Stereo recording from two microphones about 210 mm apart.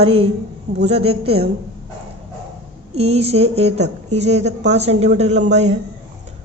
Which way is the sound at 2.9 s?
30° right (ahead or behind).